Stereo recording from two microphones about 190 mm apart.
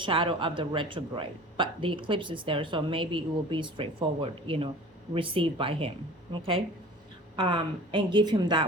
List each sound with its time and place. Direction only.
0.0 s speech: 30° right (ahead or behind)
7.3 s speech: 25° right (ahead or behind)